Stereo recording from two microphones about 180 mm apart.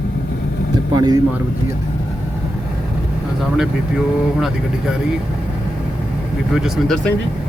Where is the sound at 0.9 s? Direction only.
25° right (ahead or behind).